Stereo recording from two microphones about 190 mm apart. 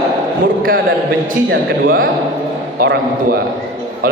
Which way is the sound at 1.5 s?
50° right (ahead or behind).